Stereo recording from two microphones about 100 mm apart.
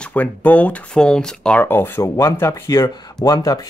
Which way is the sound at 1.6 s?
20° left (ahead or behind).